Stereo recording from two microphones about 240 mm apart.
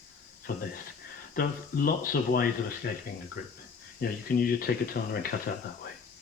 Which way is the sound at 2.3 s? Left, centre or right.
Left.